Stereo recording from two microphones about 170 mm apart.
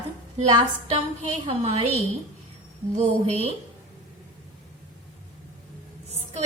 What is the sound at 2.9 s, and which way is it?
Speech, 40° right (ahead or behind).